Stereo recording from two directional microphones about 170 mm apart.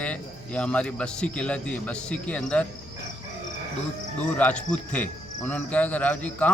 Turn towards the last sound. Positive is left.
turn(degrees=10)  # may be behind; listen again after turning